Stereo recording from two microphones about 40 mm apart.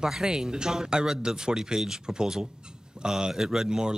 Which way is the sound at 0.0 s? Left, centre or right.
Centre.